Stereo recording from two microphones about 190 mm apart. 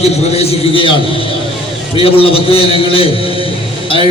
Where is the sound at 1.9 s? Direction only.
30° left (ahead or behind).